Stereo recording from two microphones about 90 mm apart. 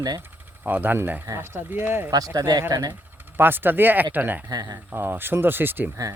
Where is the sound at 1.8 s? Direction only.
25° right (ahead or behind).